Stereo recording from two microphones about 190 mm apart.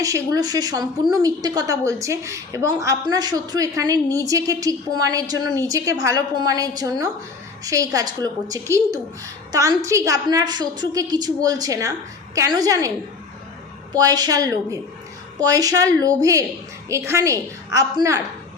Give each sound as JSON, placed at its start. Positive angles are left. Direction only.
{"t": 0.0, "sound": "a woman's voice", "side_deg": -20}
{"t": 13.9, "sound": "a woman's voice", "side_deg": -20}